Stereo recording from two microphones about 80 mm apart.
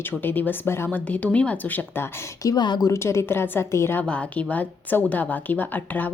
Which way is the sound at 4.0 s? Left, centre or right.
Centre.